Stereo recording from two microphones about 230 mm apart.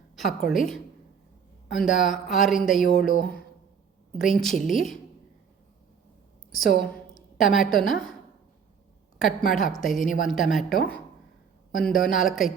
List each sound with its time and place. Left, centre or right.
0.2 s speech: centre
4.4 s speech: centre
6.5 s a woman's voice: centre
9.2 s speech: centre